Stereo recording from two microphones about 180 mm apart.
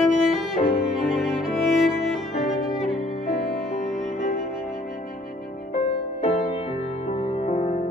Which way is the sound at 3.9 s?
45° left (ahead or behind).